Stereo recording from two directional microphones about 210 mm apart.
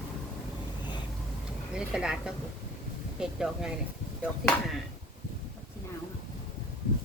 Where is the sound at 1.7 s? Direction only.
5° right (ahead or behind).